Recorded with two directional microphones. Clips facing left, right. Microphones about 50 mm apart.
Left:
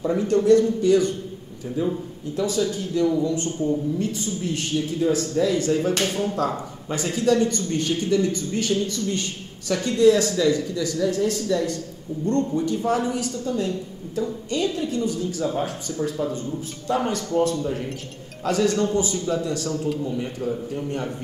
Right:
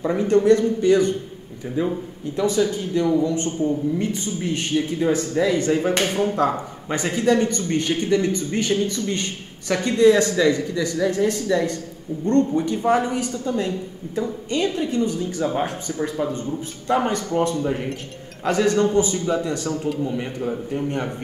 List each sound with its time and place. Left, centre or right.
0.0 s a man's voice: right
2.3 s a man's voice: right